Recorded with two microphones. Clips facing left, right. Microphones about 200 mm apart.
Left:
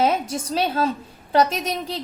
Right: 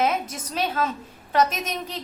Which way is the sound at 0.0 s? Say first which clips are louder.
Left 3 dB; 30° left (ahead or behind).